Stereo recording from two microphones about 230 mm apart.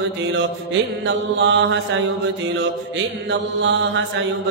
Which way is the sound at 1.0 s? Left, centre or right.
Right.